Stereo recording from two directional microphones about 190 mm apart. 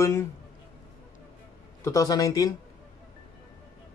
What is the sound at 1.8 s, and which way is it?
Speech, 20° left (ahead or behind).